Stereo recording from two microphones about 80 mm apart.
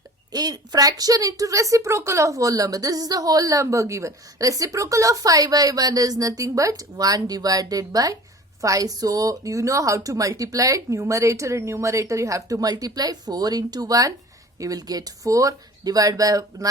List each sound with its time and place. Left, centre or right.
0.3 s a woman's voice: right